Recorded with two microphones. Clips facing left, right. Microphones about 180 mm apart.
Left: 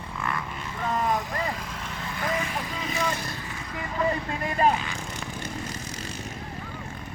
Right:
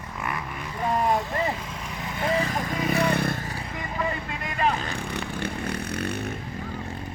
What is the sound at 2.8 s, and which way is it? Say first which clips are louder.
Vehicle: right 7 dB; 60° right (ahead or behind).